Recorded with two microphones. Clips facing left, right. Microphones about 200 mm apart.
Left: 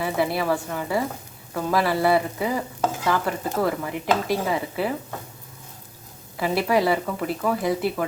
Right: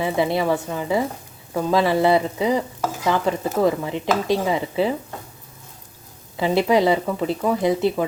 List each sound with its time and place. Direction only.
0.0 s speech: 20° right (ahead or behind)
6.3 s speech: 20° right (ahead or behind)